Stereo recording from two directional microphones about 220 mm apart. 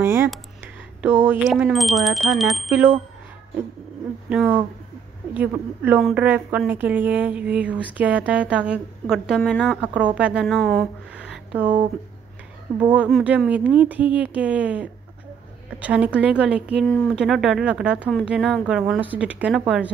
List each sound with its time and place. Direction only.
0.0 s a woman's voice: 10° right (ahead or behind)
4.3 s a woman's voice: 5° right (ahead or behind)